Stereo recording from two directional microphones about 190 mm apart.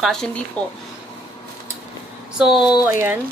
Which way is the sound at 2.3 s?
Centre (ahead or behind).